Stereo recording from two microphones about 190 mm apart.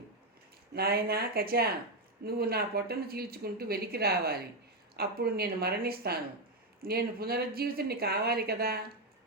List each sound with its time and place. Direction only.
0.7 s a woman's voice: 55° right (ahead or behind)